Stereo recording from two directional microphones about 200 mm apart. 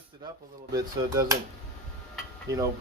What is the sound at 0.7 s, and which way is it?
Speech, 15° right (ahead or behind).